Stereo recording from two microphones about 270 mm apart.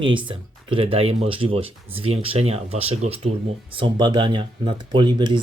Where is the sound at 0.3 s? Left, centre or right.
Centre.